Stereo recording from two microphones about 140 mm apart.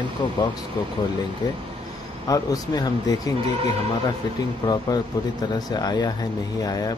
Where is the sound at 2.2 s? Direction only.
25° left (ahead or behind).